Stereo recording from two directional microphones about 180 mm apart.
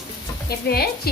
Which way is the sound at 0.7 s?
60° left (ahead or behind).